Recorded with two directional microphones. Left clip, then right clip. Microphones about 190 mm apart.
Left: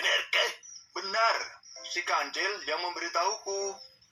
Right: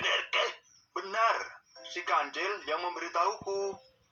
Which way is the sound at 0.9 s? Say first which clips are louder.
Left 1 dB; 20° left (ahead or behind).